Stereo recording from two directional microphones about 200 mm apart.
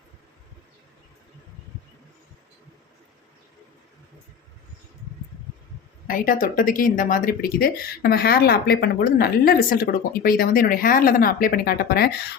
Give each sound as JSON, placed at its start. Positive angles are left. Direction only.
{"t": 6.1, "sound": "speech", "side_deg": 45}